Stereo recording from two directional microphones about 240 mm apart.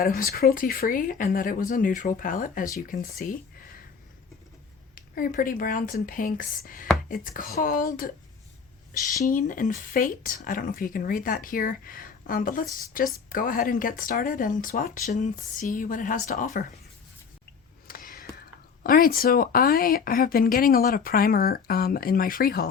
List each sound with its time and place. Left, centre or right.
0.0 s speech: left
4.9 s speech: left
17.8 s a sound: left
18.8 s speech: left